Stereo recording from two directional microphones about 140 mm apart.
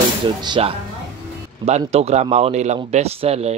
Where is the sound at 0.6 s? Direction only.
45° right (ahead or behind).